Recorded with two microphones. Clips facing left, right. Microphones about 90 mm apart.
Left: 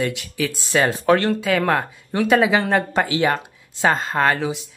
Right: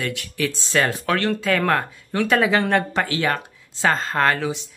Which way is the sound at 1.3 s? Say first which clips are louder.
Left 1 dB; 5° left (ahead or behind).